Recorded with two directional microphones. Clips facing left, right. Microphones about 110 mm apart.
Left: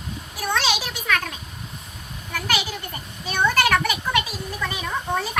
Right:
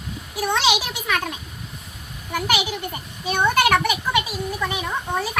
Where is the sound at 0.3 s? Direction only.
15° right (ahead or behind).